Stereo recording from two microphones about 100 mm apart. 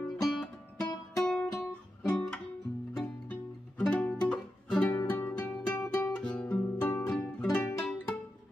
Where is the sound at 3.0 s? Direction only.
15° left (ahead or behind).